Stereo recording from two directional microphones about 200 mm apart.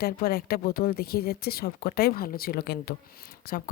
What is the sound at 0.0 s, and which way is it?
A woman's voice, 50° left (ahead or behind).